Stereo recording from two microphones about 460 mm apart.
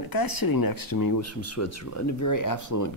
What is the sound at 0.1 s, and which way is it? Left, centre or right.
Speech, left.